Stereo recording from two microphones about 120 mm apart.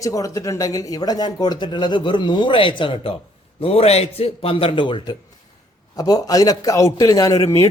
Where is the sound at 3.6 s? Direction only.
55° left (ahead or behind); by 7.7 s 25° left (ahead or behind).